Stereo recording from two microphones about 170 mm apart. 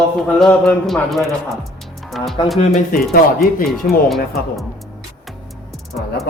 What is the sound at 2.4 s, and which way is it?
Speech, 25° left (ahead or behind).